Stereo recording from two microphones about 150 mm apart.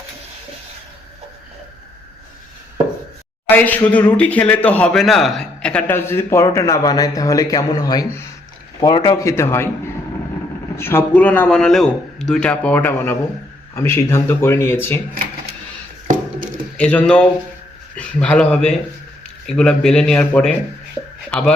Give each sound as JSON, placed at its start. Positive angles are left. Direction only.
{"t": 3.5, "sound": "a man's voice", "side_deg": 10}
{"t": 10.8, "sound": "a man's voice", "side_deg": 15}
{"t": 16.7, "sound": "a man's voice", "side_deg": 10}